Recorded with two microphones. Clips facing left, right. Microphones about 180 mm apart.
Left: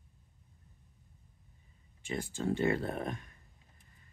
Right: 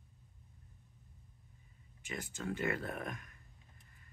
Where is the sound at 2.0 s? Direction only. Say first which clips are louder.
Left 7 dB; 30° left (ahead or behind).